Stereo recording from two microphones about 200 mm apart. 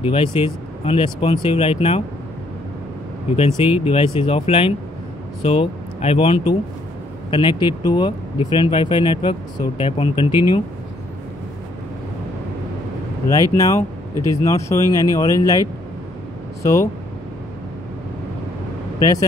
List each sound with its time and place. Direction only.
0.0 s speech: 25° left (ahead or behind)
3.8 s speech: 25° left (ahead or behind)
13.3 s speech: 15° left (ahead or behind)
16.6 s speech: 15° left (ahead or behind)
18.9 s speech: 20° left (ahead or behind)